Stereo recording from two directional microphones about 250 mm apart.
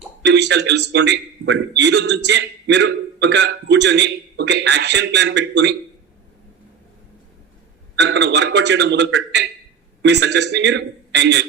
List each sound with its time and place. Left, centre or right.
0.2 s a man's voice: right
7.9 s a man's voice: right